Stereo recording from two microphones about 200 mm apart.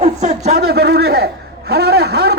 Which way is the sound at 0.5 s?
50° right (ahead or behind).